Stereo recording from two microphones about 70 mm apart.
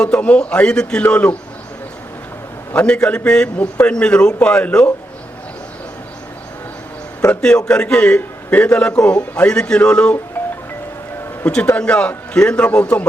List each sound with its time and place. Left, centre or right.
0.0 s a man's voice: centre
2.7 s a man's voice: centre
7.3 s a man's voice: centre
11.4 s a man's voice: centre